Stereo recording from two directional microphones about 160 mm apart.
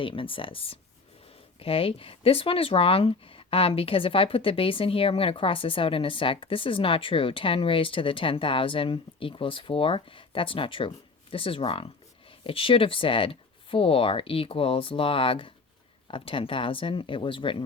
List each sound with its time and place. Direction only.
0.0 s speech: 35° left (ahead or behind)